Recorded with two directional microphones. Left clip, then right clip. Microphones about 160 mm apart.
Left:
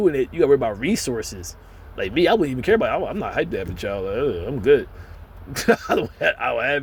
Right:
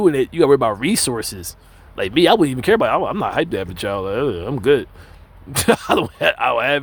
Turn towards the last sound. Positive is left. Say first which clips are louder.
# right 4 dB
turn(degrees=-50)  # may be behind; listen again after turning